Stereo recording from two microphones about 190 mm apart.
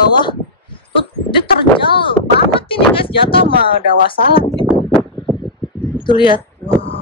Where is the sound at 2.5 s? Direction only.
25° left (ahead or behind).